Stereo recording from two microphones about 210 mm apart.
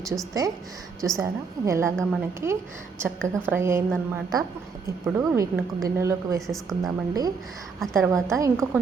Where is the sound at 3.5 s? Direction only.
10° right (ahead or behind).